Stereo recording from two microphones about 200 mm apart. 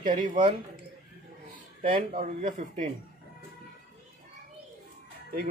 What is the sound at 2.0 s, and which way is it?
Speech, 40° right (ahead or behind).